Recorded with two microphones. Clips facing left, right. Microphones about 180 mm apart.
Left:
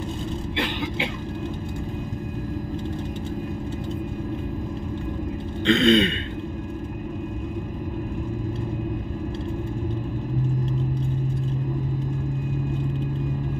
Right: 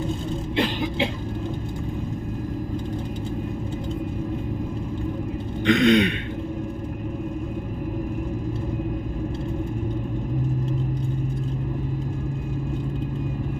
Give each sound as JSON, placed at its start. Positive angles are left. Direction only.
{"t": 5.7, "sound": "throat clearing", "side_deg": -15}